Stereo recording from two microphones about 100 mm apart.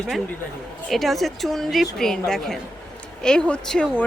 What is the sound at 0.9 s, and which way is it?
A woman's voice, centre (ahead or behind).